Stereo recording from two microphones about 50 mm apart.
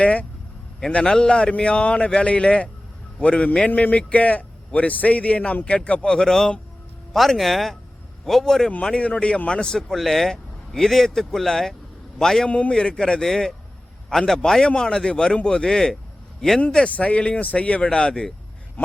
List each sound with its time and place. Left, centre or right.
0.0 s a man's voice: left
3.7 s a man's voice: left; by 8.7 s centre
8.8 s a man's voice: centre
9.9 s speech: centre
12.5 s a man's voice: left
12.8 s speech: centre
16.7 s a man's voice: left
17.8 s speech: centre